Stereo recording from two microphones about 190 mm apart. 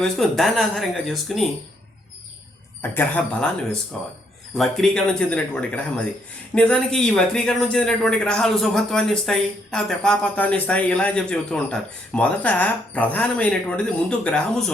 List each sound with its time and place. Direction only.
0.0 s a man's voice: centre (ahead or behind)
2.8 s a man's voice: 10° left (ahead or behind)